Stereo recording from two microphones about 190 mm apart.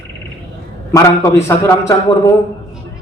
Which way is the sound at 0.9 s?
15° left (ahead or behind).